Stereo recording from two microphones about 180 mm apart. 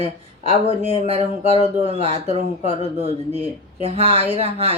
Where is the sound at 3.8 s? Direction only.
35° right (ahead or behind).